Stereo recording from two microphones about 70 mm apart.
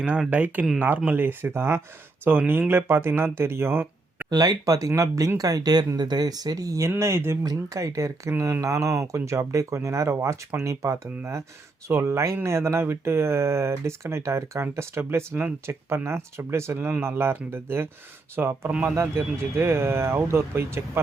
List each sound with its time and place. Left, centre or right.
0.0 s speech: centre; by 4.3 s right
4.3 s speech: right
5.4 s speech: right
6.0 s speech: right
7.4 s speech: right